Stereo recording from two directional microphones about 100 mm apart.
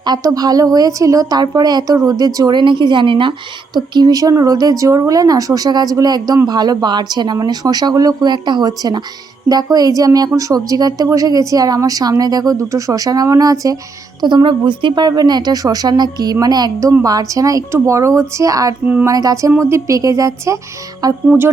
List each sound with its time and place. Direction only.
0.0 s speech: 40° right (ahead or behind)
14.2 s a woman's voice: 50° right (ahead or behind)